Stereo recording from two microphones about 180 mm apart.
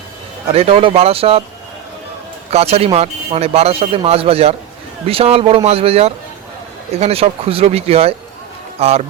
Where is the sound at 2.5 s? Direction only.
35° right (ahead or behind).